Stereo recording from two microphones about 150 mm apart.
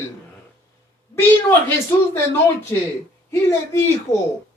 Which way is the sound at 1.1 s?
15° left (ahead or behind).